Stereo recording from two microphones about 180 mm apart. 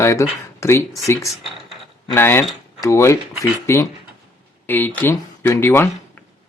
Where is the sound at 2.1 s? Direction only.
15° left (ahead or behind).